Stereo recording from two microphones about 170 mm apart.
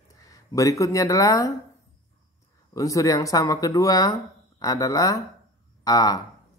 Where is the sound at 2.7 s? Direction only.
20° left (ahead or behind).